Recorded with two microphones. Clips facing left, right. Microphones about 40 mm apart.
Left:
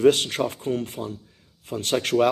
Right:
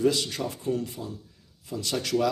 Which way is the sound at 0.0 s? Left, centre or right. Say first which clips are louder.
Left 7 dB; left.